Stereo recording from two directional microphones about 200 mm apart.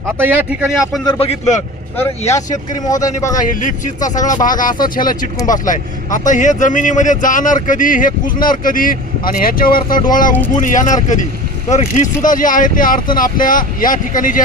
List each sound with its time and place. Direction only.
0.2 s speech: 10° right (ahead or behind)
1.0 s speech: 30° left (ahead or behind)
2.3 s speech: 15° left (ahead or behind)
3.3 s a man's voice: 40° left (ahead or behind)